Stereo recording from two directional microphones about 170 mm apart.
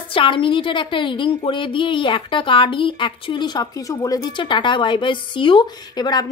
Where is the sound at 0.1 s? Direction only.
30° left (ahead or behind).